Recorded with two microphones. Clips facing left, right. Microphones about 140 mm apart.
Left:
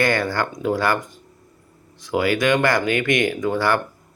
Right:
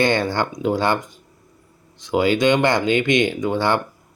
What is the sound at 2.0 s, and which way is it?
Speech, 25° right (ahead or behind).